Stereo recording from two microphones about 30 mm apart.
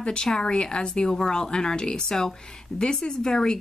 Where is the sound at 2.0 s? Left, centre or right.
Centre.